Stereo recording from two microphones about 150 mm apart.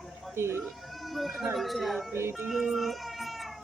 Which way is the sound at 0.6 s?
Centre (ahead or behind).